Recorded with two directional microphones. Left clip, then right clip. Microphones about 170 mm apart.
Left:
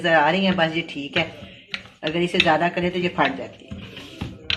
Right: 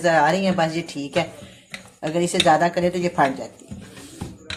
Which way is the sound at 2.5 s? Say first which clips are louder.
Right 2 dB; 75° right (ahead or behind).